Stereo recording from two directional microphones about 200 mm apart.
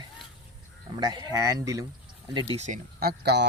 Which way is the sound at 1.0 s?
20° right (ahead or behind).